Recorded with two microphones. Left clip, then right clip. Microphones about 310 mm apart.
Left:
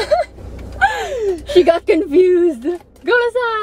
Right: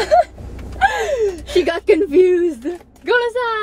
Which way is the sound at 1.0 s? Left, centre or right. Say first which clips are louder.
Right 1 dB; centre.